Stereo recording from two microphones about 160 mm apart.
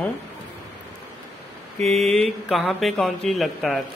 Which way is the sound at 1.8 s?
Centre (ahead or behind).